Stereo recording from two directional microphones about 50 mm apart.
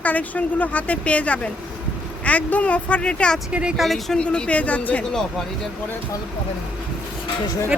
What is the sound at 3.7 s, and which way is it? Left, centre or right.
Speech, centre.